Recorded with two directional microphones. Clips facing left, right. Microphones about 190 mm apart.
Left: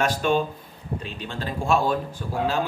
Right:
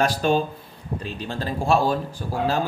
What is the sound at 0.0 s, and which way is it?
A man's voice, 35° right (ahead or behind).